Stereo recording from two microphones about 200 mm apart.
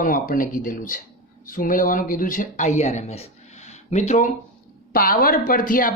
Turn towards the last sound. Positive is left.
turn(degrees=45)  # may be behind; listen again after turning